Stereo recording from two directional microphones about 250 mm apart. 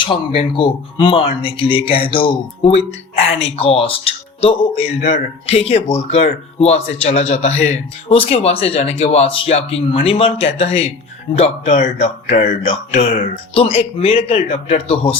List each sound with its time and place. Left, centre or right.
0.0 s speech: left